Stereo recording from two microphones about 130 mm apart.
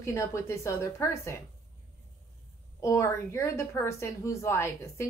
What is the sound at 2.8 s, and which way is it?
A woman's voice, 25° left (ahead or behind).